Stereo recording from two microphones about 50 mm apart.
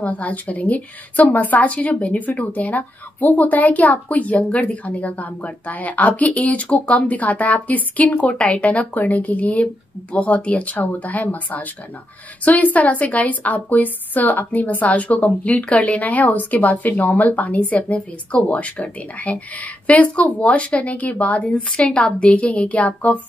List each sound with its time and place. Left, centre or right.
0.0 s speech: left